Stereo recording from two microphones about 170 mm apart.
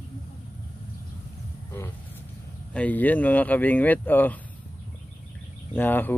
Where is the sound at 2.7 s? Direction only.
10° left (ahead or behind).